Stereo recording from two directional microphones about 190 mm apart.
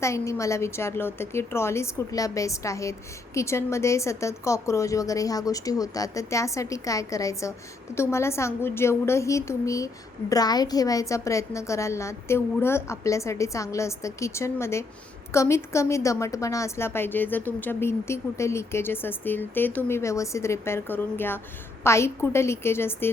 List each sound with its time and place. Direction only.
0.0 s a woman's voice: 15° left (ahead or behind)